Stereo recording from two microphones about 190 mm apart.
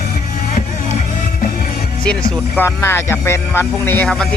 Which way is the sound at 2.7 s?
10° left (ahead or behind).